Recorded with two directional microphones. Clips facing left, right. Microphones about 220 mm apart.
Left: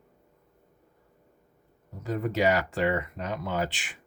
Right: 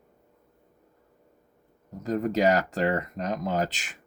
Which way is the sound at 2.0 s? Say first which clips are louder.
Right 2 dB; 40° right (ahead or behind).